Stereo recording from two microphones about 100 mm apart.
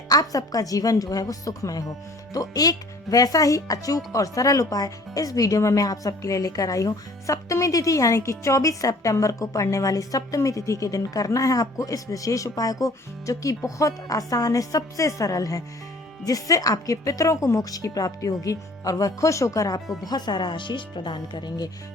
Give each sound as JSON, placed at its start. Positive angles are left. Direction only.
{"t": 0.1, "sound": "speech", "side_deg": 40}
{"t": 20.1, "sound": "speech", "side_deg": 45}